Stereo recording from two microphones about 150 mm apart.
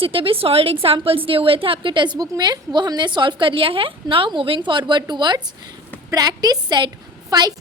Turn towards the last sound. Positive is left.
turn(degrees=-25)  # may be behind; listen again after turning